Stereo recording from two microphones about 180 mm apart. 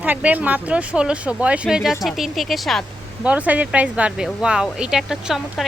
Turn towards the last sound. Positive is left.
turn(degrees=0)  # may be behind; listen again after turning